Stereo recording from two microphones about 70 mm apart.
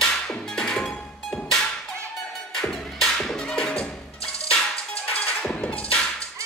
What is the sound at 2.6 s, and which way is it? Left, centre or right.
Music, centre.